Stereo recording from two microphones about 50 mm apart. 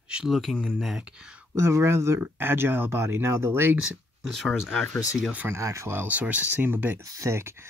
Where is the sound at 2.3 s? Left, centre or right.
Right.